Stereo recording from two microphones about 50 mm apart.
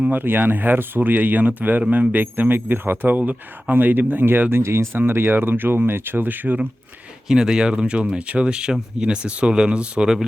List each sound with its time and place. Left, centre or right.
0.1 s speech: right
4.6 s speech: right
4.9 s speech: right
7.3 s speech: centre